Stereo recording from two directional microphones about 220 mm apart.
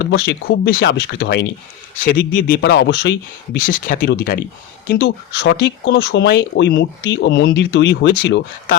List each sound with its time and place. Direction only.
0.0 s speech: 50° left (ahead or behind)